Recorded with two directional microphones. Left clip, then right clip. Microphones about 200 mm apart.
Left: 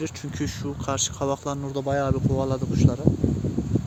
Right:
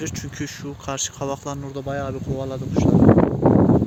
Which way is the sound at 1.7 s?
20° left (ahead or behind).